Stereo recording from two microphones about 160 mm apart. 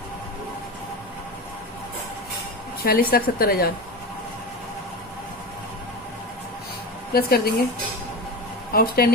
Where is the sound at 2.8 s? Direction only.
70° left (ahead or behind).